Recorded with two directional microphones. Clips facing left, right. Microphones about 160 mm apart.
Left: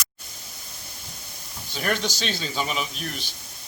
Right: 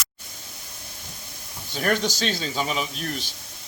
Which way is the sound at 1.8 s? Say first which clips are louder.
Right 3 dB; 40° right (ahead or behind).